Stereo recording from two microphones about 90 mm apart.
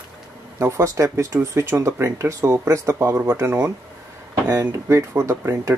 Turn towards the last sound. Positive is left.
turn(degrees=-35)  # may be behind; listen again after turning